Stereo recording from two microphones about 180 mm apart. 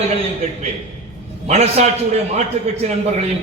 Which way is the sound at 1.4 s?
35° right (ahead or behind).